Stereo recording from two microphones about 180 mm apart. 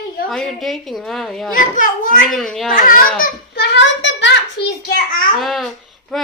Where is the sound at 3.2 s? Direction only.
70° left (ahead or behind).